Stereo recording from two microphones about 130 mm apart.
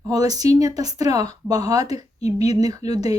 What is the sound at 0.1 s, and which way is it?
Speech, 30° right (ahead or behind).